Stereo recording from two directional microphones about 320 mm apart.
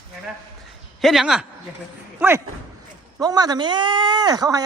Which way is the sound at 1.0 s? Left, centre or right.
Centre.